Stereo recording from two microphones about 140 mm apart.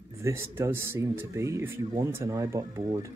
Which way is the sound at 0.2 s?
20° right (ahead or behind).